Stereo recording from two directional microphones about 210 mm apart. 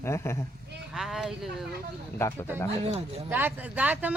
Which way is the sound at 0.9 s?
Centre (ahead or behind).